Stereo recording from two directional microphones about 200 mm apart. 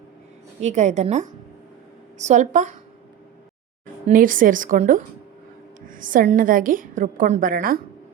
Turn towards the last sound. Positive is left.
turn(degrees=-45)  # may be behind; listen again after turning